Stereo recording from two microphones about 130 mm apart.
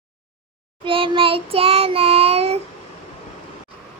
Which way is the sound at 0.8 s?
40° right (ahead or behind).